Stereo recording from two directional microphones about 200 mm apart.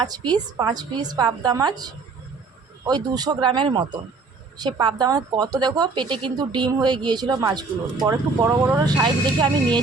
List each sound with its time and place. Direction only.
0.0 s speech: 20° right (ahead or behind)